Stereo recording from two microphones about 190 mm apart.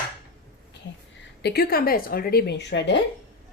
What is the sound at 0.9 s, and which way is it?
A woman's voice, 70° left (ahead or behind).